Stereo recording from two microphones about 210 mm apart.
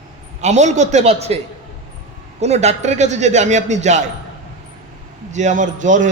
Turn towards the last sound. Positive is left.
turn(degrees=-35)  # may be behind; listen again after turning